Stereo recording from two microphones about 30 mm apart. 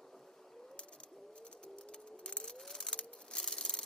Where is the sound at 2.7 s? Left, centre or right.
Left.